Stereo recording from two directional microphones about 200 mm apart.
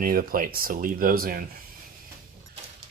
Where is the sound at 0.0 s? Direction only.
45° right (ahead or behind).